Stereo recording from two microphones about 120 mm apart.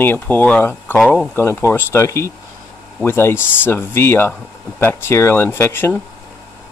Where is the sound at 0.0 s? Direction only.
15° left (ahead or behind).